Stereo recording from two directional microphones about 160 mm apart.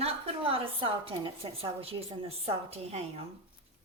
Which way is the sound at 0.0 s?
35° right (ahead or behind).